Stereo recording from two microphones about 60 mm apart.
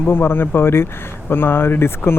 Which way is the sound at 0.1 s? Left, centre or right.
Left.